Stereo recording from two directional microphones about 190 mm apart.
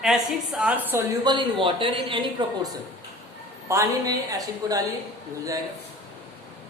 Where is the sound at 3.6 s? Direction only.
15° right (ahead or behind).